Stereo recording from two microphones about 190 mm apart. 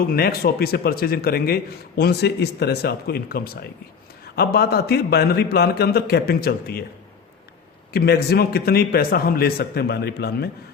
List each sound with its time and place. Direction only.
0.0 s a man's voice: 50° left (ahead or behind)
7.9 s a man's voice: 55° left (ahead or behind)